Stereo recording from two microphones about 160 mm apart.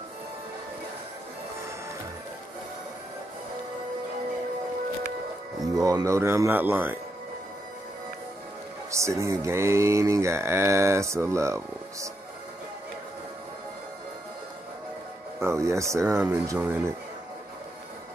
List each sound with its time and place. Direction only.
5.6 s mantra: 20° right (ahead or behind)
8.9 s mantra: 20° right (ahead or behind)
15.4 s speech: 20° right (ahead or behind)
16.5 s mantra: 10° right (ahead or behind)